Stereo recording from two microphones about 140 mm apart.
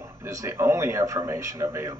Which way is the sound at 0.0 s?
20° right (ahead or behind).